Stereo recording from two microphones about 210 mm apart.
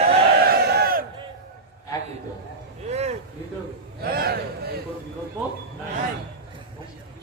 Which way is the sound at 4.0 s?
45° right (ahead or behind).